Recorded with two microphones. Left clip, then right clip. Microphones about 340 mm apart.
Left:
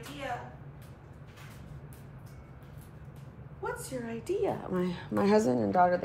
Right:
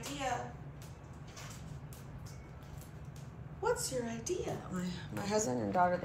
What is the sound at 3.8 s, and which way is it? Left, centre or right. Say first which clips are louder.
A woman's voice: left 2 dB; centre.